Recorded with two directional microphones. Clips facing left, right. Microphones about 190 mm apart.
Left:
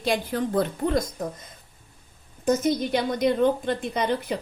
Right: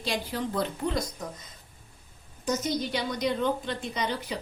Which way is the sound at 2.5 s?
55° left (ahead or behind).